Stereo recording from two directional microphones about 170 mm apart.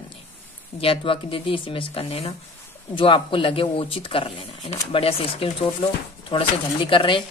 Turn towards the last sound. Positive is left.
turn(degrees=30)  # may be behind; listen again after turning